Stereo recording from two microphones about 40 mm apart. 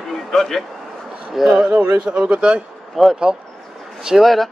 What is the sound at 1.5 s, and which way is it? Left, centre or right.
Speech, right.